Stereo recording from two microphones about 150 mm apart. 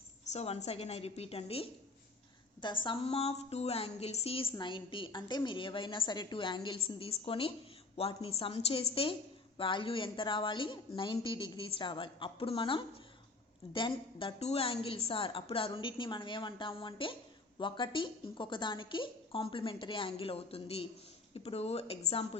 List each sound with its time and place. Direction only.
0.3 s a woman's voice: 45° left (ahead or behind)
2.8 s a woman's voice: 35° left (ahead or behind)